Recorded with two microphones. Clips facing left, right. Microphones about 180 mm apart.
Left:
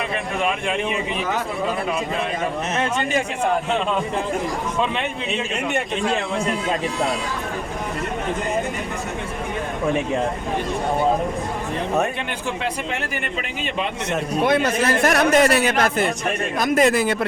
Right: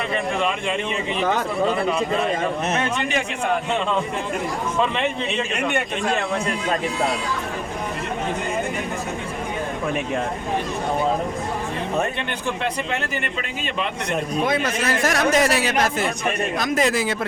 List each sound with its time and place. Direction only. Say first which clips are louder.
14.4 s speech: left 6 dB; 60° left (ahead or behind)